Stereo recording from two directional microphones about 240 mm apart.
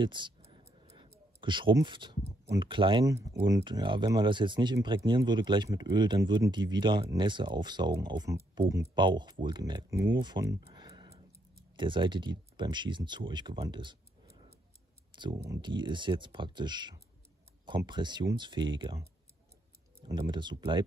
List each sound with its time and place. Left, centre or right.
0.0 s speech: centre
10.7 s a sound: centre
11.7 s speech: centre
15.1 s speech: centre
20.1 s speech: centre